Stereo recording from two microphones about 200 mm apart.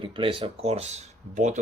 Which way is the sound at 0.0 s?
25° right (ahead or behind).